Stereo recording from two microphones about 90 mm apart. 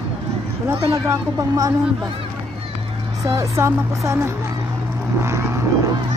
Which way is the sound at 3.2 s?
35° right (ahead or behind).